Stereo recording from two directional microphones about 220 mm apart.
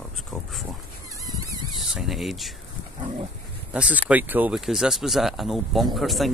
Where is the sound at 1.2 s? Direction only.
15° right (ahead or behind).